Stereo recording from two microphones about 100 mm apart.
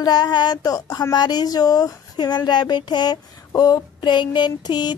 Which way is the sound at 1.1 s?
45° left (ahead or behind).